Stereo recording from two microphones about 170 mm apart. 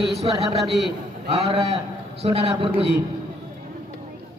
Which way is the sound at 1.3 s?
35° right (ahead or behind).